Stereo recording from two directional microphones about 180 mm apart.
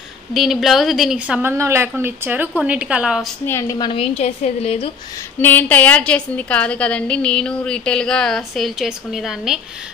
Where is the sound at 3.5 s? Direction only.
15° left (ahead or behind); by 4.9 s 35° left (ahead or behind).